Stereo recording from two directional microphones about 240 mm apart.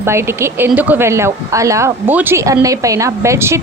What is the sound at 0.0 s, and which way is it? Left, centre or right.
Speech, centre.